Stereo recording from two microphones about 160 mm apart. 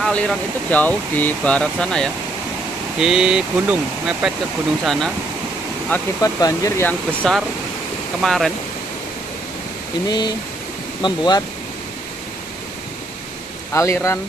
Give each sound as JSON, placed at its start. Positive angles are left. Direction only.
{"t": 0.0, "sound": "speech", "side_deg": 5}
{"t": 5.9, "sound": "speech", "side_deg": 10}
{"t": 6.9, "sound": "speech", "side_deg": 0}
{"t": 10.0, "sound": "speech", "side_deg": 25}
{"t": 13.7, "sound": "speech", "side_deg": 20}